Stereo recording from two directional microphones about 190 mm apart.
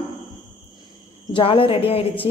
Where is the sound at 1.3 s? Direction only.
25° left (ahead or behind).